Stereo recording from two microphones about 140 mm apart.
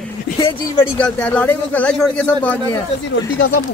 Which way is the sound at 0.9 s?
10° left (ahead or behind).